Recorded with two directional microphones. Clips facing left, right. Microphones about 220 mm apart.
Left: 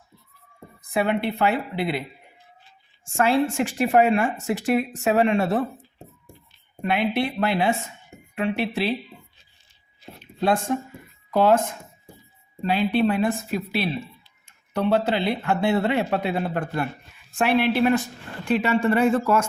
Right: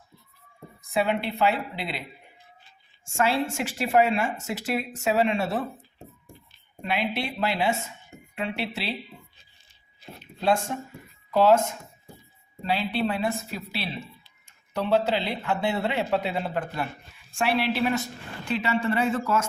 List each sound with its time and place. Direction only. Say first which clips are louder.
0.9 s speech: left 2 dB; 55° left (ahead or behind)
3.2 s speech: left 5 dB; 55° left (ahead or behind)
6.8 s speech: left 5 dB; 55° left (ahead or behind)
11.3 s speech: left 1 dB; 55° left (ahead or behind)
12.6 s speech: left 6 dB; 50° left (ahead or behind)